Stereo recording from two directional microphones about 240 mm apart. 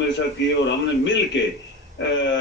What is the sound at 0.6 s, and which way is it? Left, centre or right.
A man's voice, left.